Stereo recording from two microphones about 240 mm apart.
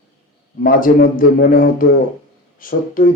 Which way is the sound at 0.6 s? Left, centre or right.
Left.